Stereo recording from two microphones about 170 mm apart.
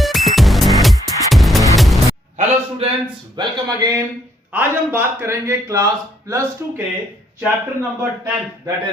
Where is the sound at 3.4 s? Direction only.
25° right (ahead or behind).